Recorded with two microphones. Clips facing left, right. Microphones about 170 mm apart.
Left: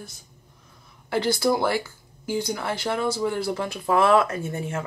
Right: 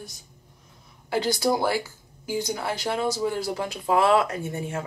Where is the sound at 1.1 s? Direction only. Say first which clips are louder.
Left 1 dB; 15° right (ahead or behind).